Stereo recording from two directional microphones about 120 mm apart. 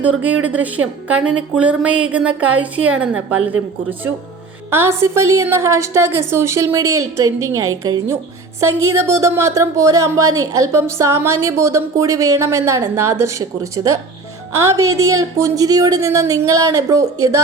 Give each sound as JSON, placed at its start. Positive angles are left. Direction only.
{"t": 0.0, "sound": "a woman's voice", "side_deg": -15}